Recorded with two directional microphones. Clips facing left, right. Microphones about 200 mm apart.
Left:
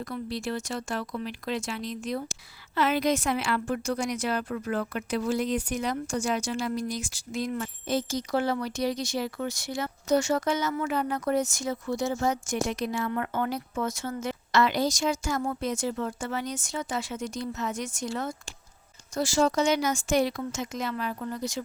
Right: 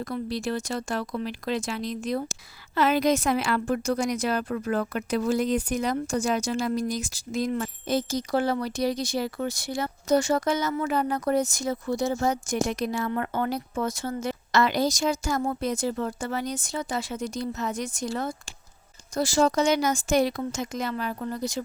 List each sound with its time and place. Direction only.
0.0 s a woman's voice: 40° right (ahead or behind)